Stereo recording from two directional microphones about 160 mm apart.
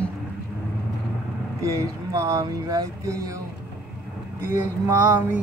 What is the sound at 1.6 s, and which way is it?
Speech, 20° right (ahead or behind).